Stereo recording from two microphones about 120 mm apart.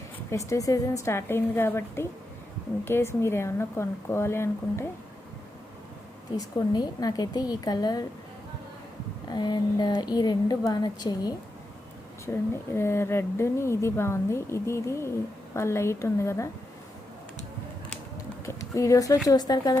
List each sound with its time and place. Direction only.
0.3 s speech: 25° left (ahead or behind)
6.3 s a woman's voice: 30° left (ahead or behind)
9.3 s a woman's voice: 35° left (ahead or behind)
12.2 s speech: 20° left (ahead or behind)
18.4 s a sound: 25° left (ahead or behind)
19.3 s a woman's voice: 35° left (ahead or behind)